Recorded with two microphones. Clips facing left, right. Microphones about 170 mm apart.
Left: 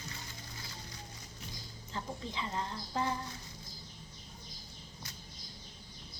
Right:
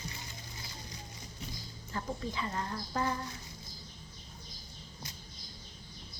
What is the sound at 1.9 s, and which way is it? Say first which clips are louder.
A woman's voice: right 3 dB; 20° left (ahead or behind).